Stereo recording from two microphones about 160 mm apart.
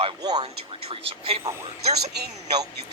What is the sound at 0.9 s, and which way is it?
Speech, 40° right (ahead or behind).